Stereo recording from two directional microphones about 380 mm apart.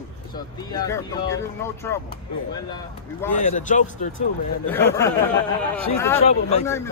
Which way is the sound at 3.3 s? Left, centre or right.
Centre.